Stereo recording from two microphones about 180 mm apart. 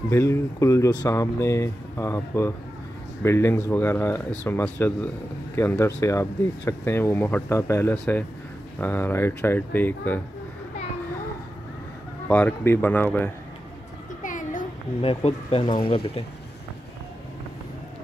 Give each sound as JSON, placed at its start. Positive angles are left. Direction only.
{"t": 0.1, "sound": "speech", "side_deg": 15}
{"t": 12.3, "sound": "speech", "side_deg": 10}
{"t": 14.2, "sound": "a sound", "side_deg": 45}
{"t": 15.0, "sound": "speech", "side_deg": 30}